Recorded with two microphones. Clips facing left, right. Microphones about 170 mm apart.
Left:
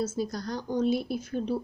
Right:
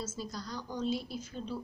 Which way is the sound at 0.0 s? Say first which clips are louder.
Left 9 dB; 60° left (ahead or behind).